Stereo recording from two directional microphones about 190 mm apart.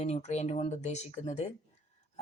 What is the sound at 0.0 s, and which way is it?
Speech, 35° left (ahead or behind).